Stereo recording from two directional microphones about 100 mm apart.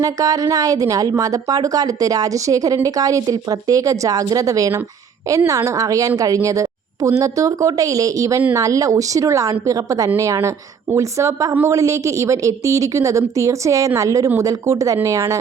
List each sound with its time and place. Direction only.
0.0 s speech: 35° right (ahead or behind)